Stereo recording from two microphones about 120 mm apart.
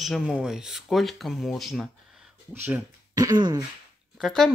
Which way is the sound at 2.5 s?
15° right (ahead or behind).